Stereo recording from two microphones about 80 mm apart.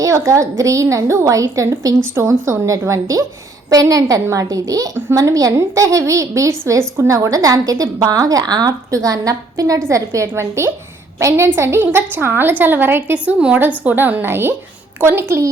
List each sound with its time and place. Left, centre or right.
0.0 s a woman's voice: right
2.1 s a woman's voice: right
13.1 s a woman's voice: centre; by 15.4 s right